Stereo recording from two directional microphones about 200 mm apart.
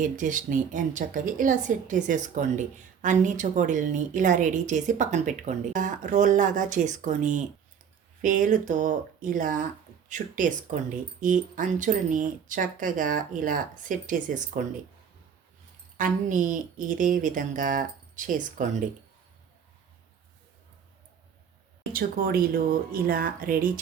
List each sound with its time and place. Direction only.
0.0 s a woman's voice: 40° right (ahead or behind)
16.0 s a woman's voice: 40° right (ahead or behind)
21.9 s speech: 45° right (ahead or behind)